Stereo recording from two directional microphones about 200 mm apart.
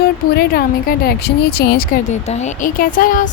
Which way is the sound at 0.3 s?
50° left (ahead or behind).